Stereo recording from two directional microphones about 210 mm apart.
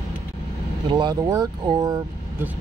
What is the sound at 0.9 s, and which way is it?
Speech, 20° right (ahead or behind).